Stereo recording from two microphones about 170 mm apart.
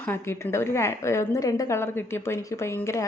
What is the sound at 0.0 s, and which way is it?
Speech, 15° left (ahead or behind).